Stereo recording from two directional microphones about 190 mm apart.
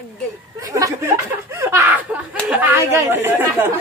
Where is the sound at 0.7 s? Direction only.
15° right (ahead or behind).